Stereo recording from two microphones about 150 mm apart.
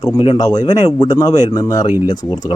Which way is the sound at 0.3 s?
25° left (ahead or behind).